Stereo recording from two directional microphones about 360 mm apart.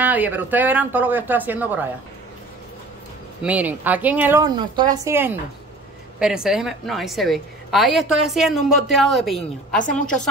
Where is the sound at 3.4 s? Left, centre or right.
Centre.